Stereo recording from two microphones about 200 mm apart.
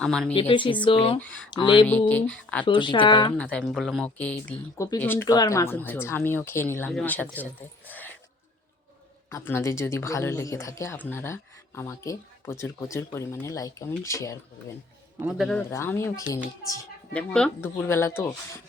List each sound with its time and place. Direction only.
0.0 s speech: 5° left (ahead or behind)
0.3 s speech: 25° left (ahead or behind)
1.9 s speech: 10° left (ahead or behind)
2.6 s speech: 25° left (ahead or behind)
3.3 s speech: 5° left (ahead or behind)
7.9 s a sound: 10° left (ahead or behind)
9.3 s speech: 10° left (ahead or behind)
15.2 s speech: centre (ahead or behind)
15.7 s speech: 15° left (ahead or behind)